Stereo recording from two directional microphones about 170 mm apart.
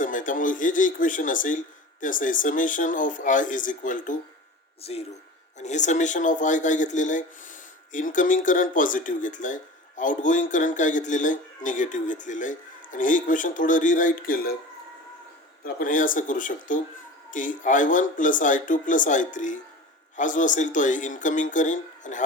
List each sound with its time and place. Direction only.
0.0 s speech: 50° left (ahead or behind)
4.8 s speech: 35° left (ahead or behind); by 14.5 s 55° left (ahead or behind)
15.6 s speech: 50° left (ahead or behind)